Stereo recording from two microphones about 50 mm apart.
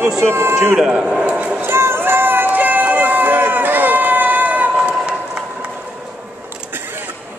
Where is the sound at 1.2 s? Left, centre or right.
Right.